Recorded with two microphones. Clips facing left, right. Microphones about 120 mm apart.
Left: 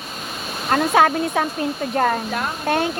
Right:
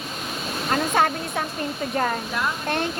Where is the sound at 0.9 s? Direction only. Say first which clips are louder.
Left 6 dB; 70° left (ahead or behind).